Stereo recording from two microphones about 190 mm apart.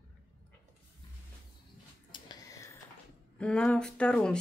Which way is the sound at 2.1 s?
20° left (ahead or behind).